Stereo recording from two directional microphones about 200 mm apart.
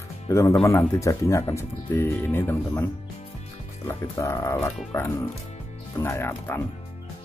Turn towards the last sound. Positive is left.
turn(degrees=10)  # may be behind; listen again after turning